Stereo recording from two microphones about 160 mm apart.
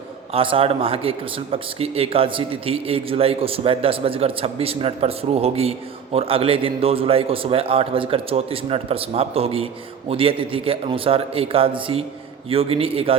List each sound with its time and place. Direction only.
0.3 s speech: 35° right (ahead or behind)